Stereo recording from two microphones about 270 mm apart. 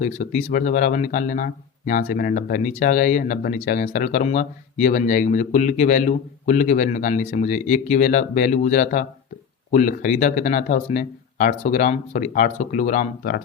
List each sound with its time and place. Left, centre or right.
0.0 s speech: left